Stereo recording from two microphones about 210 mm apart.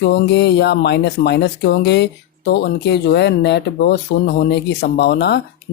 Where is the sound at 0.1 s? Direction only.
55° left (ahead or behind).